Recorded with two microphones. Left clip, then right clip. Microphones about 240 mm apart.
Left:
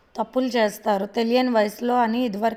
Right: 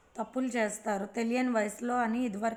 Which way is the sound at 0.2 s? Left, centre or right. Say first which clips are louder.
Left 10 dB; left.